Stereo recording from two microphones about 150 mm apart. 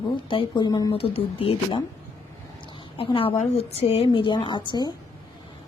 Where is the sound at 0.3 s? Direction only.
35° left (ahead or behind).